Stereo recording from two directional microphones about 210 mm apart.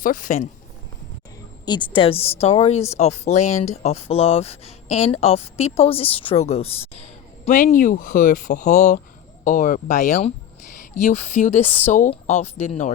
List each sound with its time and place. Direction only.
0.0 s speech: 40° left (ahead or behind)
1.6 s a woman's voice: 20° left (ahead or behind)